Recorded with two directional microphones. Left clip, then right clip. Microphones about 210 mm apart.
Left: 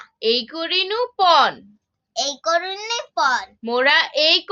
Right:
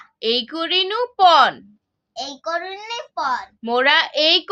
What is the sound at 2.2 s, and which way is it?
A child's voice, 45° left (ahead or behind).